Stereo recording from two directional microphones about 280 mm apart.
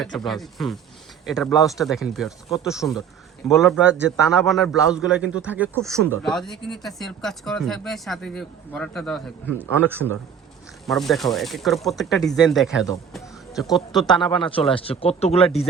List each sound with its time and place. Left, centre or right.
0.3 s a man's voice: centre
14.7 s speech: centre